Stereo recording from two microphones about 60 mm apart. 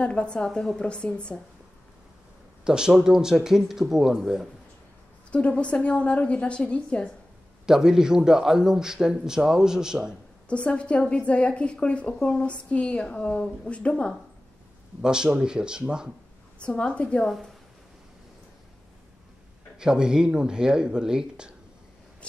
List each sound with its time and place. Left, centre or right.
0.0 s speech: centre
2.6 s a man's voice: centre
5.3 s a woman's voice: centre
7.6 s a man's voice: centre
10.5 s a woman's voice: centre
15.0 s a man's voice: centre
16.5 s speech: centre
19.8 s a man's voice: centre